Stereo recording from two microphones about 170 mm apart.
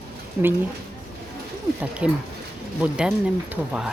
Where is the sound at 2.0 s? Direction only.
5° right (ahead or behind).